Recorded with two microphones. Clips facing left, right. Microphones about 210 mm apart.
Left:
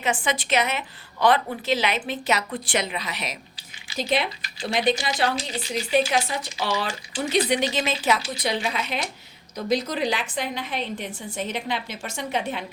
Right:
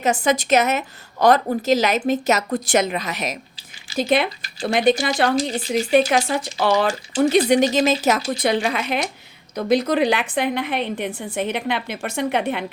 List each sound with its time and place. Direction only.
0.0 s a woman's voice: 40° right (ahead or behind); by 12.6 s 60° right (ahead or behind)